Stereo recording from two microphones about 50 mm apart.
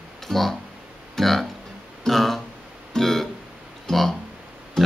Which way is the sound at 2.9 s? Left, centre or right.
Centre.